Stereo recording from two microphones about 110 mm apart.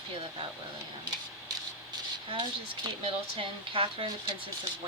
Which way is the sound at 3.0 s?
55° right (ahead or behind).